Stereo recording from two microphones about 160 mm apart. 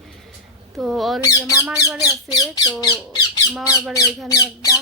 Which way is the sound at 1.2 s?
20° left (ahead or behind).